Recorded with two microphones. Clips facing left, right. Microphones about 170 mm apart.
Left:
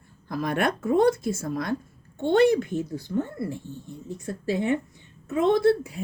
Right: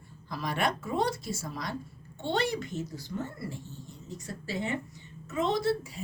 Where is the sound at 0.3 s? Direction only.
50° left (ahead or behind).